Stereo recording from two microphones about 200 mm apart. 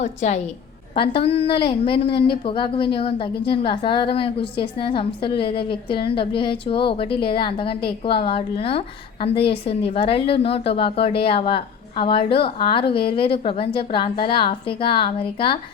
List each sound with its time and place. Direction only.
0.0 s a woman's voice: 35° left (ahead or behind)